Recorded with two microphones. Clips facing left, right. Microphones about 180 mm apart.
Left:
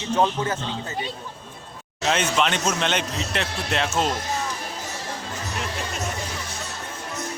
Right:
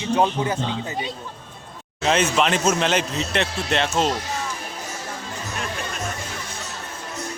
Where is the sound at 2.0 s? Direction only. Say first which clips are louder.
Right 3 dB; centre (ahead or behind).